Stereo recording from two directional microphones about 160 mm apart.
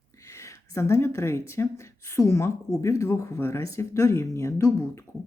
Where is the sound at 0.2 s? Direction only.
20° left (ahead or behind).